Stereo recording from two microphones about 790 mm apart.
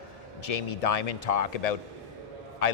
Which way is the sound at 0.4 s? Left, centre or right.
Left.